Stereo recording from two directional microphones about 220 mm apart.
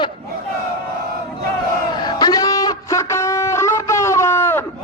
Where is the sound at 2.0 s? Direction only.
20° left (ahead or behind).